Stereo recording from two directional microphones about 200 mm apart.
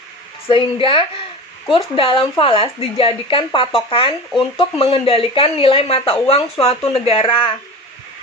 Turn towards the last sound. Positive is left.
turn(degrees=25)  # may be behind; listen again after turning